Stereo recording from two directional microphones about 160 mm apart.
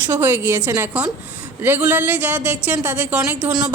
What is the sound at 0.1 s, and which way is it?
A woman's voice, 15° right (ahead or behind).